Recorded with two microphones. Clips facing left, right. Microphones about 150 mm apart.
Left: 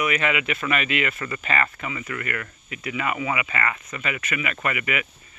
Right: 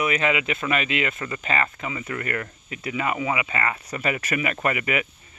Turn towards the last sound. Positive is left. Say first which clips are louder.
# right 2 dB
turn(degrees=-30)  # may be behind; listen again after turning